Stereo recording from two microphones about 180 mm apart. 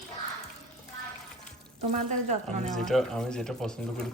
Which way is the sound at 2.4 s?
Centre (ahead or behind).